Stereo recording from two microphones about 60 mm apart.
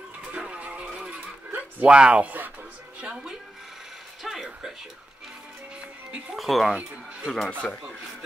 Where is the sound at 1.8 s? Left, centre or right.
Centre.